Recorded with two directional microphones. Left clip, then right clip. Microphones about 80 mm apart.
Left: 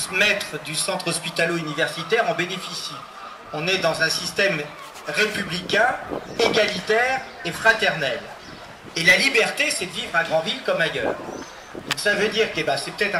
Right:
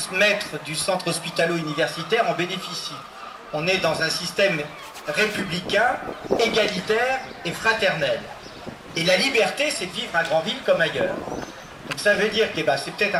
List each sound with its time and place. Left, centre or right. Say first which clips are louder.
0.0 s speech: even; left